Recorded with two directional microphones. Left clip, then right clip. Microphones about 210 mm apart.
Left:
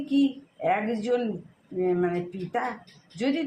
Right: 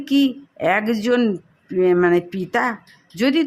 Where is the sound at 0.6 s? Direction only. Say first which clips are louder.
Right 7 dB; 35° right (ahead or behind).